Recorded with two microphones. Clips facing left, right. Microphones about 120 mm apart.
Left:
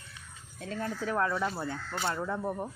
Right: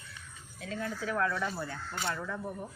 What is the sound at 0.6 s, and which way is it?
Speech, 40° left (ahead or behind).